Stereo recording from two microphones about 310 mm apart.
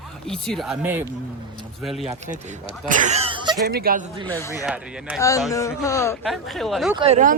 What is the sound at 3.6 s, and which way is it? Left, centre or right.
Speech, right.